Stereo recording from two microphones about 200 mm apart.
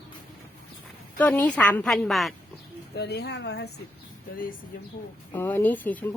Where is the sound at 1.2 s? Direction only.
5° left (ahead or behind).